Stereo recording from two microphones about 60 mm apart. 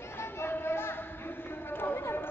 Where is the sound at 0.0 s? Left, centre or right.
Left.